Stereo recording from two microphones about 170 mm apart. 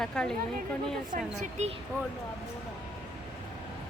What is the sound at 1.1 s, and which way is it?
Speech, 40° right (ahead or behind).